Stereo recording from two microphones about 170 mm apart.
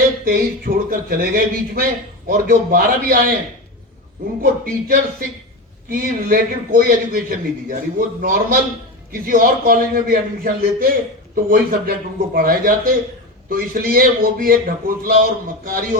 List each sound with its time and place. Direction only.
0.3 s a man's voice: 55° right (ahead or behind)
4.6 s a man's voice: 55° right (ahead or behind)